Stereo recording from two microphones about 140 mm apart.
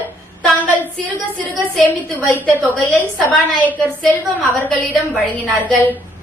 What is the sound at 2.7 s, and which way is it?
A woman's voice, 10° left (ahead or behind).